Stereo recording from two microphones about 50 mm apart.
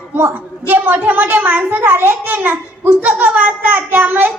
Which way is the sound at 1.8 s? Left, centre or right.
Right.